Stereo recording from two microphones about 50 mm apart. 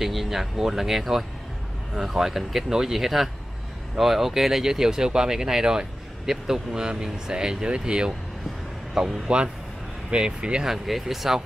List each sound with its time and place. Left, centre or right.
0.0 s speech: centre
10.1 s speech: centre
10.7 s speech: centre